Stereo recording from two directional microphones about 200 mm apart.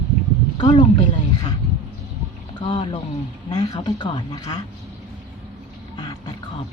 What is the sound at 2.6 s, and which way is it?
Speech, 25° left (ahead or behind).